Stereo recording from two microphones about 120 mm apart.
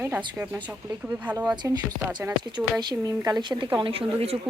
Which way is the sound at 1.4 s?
35° right (ahead or behind).